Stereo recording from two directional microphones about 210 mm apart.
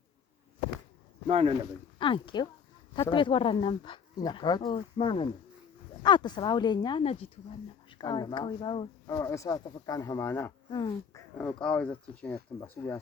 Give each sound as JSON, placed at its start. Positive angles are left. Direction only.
{"t": 1.3, "sound": "speech", "side_deg": -30}
{"t": 2.0, "sound": "speech", "side_deg": 25}
{"t": 11.3, "sound": "speech", "side_deg": 5}